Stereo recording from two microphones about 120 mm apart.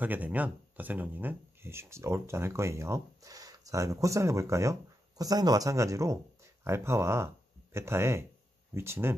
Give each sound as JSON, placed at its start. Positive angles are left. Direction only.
{"t": 0.0, "sound": "speech", "side_deg": -15}